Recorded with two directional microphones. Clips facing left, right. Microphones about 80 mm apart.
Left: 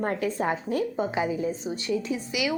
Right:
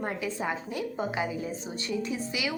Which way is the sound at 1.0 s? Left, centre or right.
Left.